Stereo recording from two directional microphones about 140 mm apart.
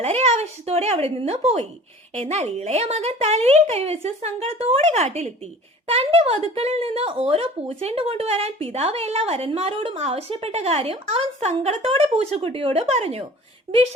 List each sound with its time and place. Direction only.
0.0 s speech: 50° right (ahead or behind)